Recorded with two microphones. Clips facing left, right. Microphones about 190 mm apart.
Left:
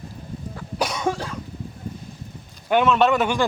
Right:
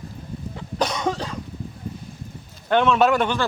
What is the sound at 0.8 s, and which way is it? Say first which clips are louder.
Cough: right 1 dB; 10° left (ahead or behind).